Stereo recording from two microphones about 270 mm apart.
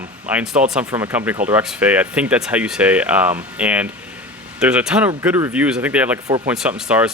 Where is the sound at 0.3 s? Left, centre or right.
Centre.